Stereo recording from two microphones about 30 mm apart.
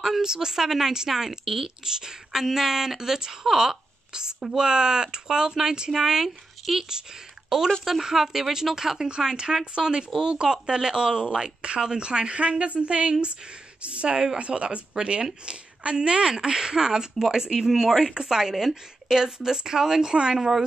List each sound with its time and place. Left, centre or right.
0.2 s speech: right
2.0 s a woman's voice: right
14.1 s a woman's voice: right
14.4 s a woman's voice: right
16.5 s a woman's voice: right; by 18.1 s centre
18.1 s a woman's voice: centre
20.3 s speech: centre